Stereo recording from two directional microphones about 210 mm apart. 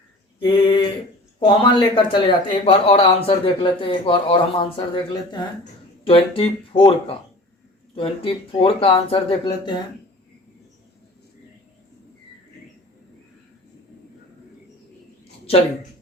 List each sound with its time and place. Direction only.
0.3 s speech: 25° left (ahead or behind)
6.1 s speech: 25° left (ahead or behind)